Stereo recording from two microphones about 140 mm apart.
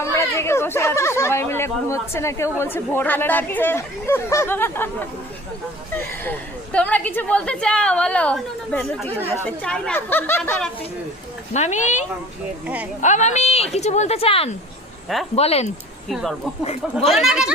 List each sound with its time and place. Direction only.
0.0 s speech: 20° left (ahead or behind)
6.0 s a woman's voice: 15° left (ahead or behind)
11.5 s speech: 55° left (ahead or behind)
12.6 s speech: 10° right (ahead or behind)
13.0 s a woman's voice: 60° left (ahead or behind)
16.0 s speech: centre (ahead or behind)